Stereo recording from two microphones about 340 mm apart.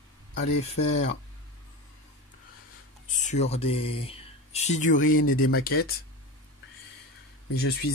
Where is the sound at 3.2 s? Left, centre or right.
Centre.